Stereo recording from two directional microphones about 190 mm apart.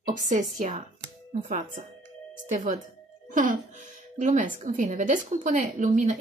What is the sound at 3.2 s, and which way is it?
Speech, 45° right (ahead or behind).